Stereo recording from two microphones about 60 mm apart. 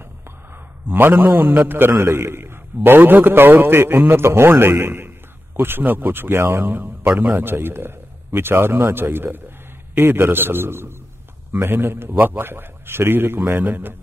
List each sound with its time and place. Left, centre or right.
0.8 s a man's voice: right